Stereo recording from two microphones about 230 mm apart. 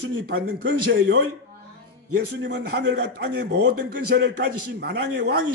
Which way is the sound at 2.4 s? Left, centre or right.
Right.